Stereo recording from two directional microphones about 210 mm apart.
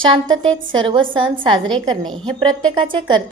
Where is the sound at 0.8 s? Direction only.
25° right (ahead or behind).